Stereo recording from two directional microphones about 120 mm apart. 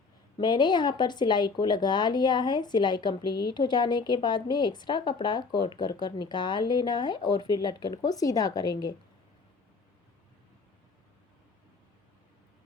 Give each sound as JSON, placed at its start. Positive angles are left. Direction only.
{"t": 0.3, "sound": "speech", "side_deg": 40}